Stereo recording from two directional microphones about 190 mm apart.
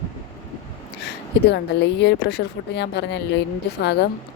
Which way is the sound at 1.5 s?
65° left (ahead or behind).